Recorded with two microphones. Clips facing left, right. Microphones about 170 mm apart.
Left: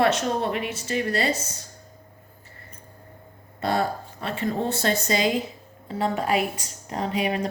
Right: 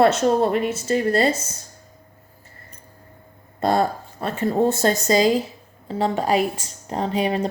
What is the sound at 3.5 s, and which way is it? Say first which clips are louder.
Speech: right 5 dB; 45° right (ahead or behind).